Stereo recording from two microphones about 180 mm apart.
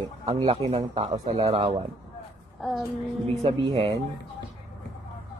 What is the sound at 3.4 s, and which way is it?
Speech, 30° right (ahead or behind).